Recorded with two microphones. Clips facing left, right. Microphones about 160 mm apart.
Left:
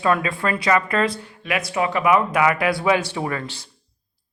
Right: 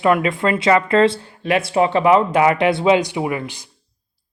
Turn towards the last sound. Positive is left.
turn(degrees=-15)  # may be behind; listen again after turning